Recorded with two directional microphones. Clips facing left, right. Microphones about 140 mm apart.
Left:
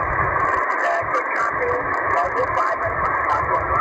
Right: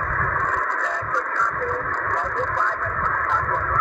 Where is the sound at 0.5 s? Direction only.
90° left.